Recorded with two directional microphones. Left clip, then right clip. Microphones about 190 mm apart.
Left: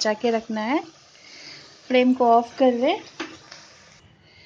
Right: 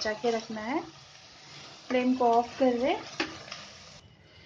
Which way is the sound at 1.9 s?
50° left (ahead or behind).